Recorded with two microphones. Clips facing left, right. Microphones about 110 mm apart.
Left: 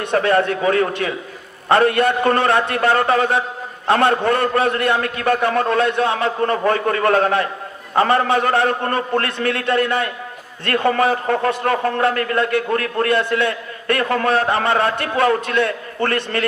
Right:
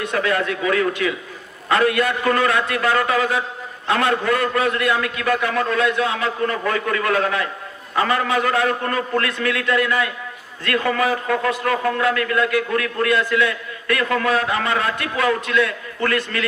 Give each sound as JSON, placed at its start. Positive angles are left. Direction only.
{"t": 0.1, "sound": "a man's voice", "side_deg": 35}